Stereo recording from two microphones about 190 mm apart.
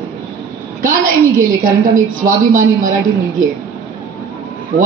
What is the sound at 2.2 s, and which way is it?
Speech, 45° right (ahead or behind).